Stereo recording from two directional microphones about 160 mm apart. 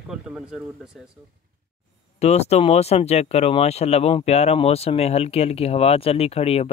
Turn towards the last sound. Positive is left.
turn(degrees=40)  # may be behind; listen again after turning